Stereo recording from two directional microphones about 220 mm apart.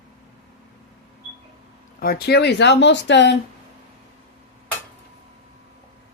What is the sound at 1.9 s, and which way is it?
Speech, 45° left (ahead or behind).